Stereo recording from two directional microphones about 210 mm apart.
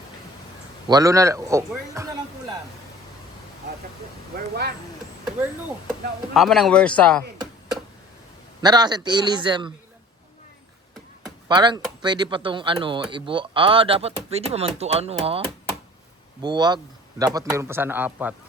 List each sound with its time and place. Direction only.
0.9 s speech: 15° right (ahead or behind)
4.4 s speech: 50° right (ahead or behind)
6.3 s a man's voice: centre (ahead or behind)
8.6 s speech: 20° right (ahead or behind)
11.4 s speech: 20° right (ahead or behind)
16.4 s speech: 20° right (ahead or behind)